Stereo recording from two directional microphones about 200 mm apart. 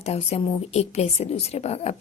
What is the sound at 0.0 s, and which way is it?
A woman's voice, 30° left (ahead or behind).